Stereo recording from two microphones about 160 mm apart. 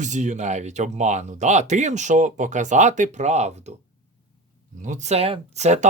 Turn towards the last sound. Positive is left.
turn(degrees=-45)  # may be behind; listen again after turning